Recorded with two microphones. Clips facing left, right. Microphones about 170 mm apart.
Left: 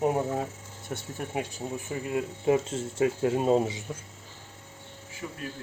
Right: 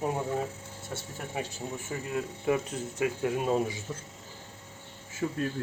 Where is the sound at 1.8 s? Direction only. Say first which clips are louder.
Left 3 dB; 25° left (ahead or behind).